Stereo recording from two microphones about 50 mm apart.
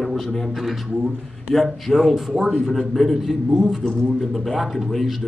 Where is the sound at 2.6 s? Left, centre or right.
Centre.